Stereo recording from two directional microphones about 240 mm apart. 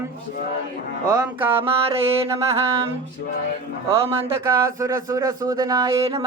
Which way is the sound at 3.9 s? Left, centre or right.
Right.